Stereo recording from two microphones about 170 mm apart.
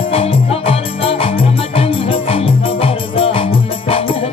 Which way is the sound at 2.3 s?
35° left (ahead or behind).